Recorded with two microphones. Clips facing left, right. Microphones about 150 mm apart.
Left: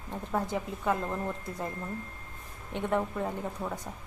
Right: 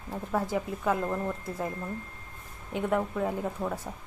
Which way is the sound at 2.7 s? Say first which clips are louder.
Right 2 dB; 5° right (ahead or behind).